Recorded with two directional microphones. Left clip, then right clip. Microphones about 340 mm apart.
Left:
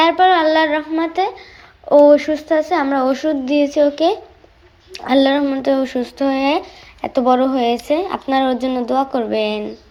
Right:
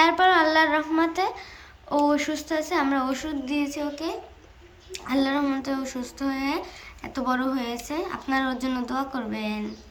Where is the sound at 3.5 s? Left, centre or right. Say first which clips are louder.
Left 15 dB; centre.